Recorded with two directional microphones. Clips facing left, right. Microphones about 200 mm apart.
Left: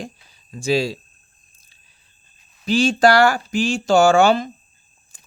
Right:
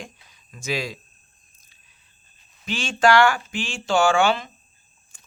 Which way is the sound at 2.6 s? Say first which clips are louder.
Left 5 dB; 35° left (ahead or behind).